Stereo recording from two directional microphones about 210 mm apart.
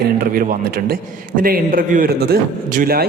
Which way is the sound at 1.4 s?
45° right (ahead or behind).